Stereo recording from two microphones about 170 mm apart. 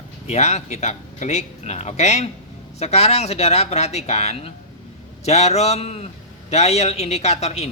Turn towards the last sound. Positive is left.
turn(degrees=40)  # may be behind; listen again after turning